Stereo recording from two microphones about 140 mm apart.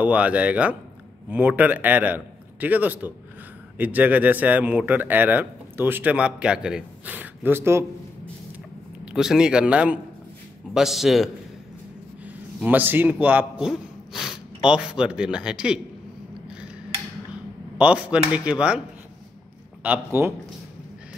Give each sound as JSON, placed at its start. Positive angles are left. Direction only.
{"t": 0.0, "sound": "speech", "side_deg": -10}
{"t": 9.0, "sound": "speech", "side_deg": -5}
{"t": 12.3, "sound": "a man's voice", "side_deg": -10}
{"t": 17.7, "sound": "speech", "side_deg": -10}
{"t": 19.8, "sound": "speech", "side_deg": -15}